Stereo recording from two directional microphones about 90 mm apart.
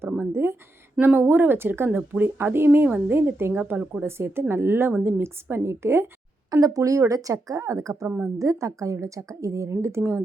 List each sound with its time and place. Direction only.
0.2 s a woman's voice: 25° right (ahead or behind)
6.5 s a woman's voice: 40° right (ahead or behind)